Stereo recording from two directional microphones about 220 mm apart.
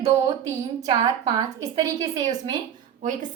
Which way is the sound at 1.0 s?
15° right (ahead or behind).